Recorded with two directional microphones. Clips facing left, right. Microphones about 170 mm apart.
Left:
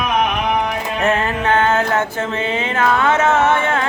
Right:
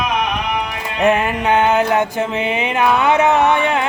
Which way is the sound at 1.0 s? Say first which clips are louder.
Right 3 dB; 15° right (ahead or behind).